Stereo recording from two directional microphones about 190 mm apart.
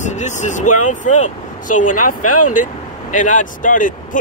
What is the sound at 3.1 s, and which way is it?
Speech, 45° left (ahead or behind).